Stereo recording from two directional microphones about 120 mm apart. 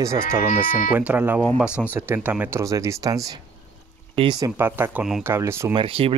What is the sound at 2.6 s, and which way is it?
Speech, 25° right (ahead or behind).